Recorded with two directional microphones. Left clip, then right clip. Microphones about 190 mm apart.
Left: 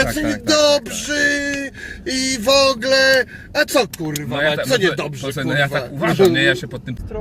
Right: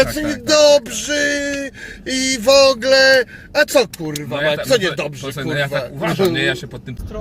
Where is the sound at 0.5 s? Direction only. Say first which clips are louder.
Right 4 dB; 20° right (ahead or behind).